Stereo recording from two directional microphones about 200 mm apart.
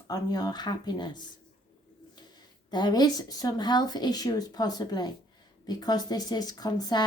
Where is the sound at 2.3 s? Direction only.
20° left (ahead or behind).